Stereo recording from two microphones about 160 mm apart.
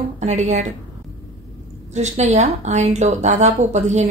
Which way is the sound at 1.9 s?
45° right (ahead or behind).